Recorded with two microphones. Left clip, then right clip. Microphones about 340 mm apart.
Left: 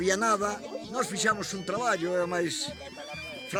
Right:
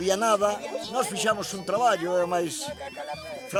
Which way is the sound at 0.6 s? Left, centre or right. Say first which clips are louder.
Right 6 dB; right.